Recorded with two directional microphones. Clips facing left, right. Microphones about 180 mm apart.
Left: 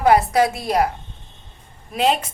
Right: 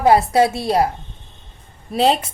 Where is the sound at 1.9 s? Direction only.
35° right (ahead or behind).